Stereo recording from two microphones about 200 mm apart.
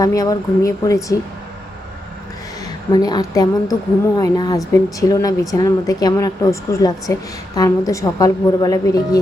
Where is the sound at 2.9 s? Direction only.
20° left (ahead or behind).